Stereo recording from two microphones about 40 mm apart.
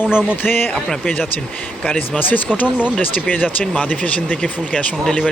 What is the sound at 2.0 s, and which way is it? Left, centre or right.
Speech, left.